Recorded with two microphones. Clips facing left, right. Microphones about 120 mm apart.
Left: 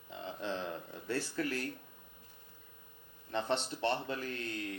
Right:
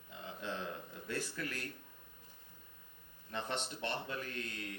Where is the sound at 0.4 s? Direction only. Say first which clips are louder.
Left 3 dB; 30° left (ahead or behind).